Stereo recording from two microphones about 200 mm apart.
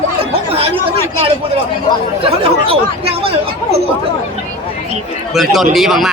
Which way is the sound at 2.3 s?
30° right (ahead or behind).